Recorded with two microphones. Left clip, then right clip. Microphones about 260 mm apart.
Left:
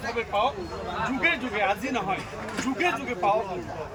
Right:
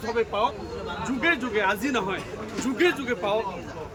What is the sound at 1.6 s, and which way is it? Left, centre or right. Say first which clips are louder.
Speech: right 1 dB; right.